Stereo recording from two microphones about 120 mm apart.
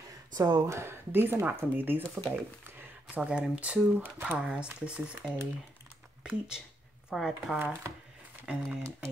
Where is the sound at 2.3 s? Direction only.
15° right (ahead or behind).